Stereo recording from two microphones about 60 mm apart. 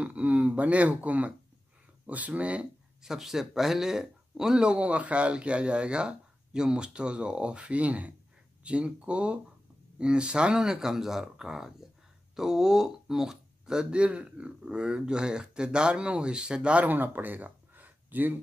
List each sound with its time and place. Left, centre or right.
0.0 s speech: right
3.0 s speech: centre; by 18.4 s right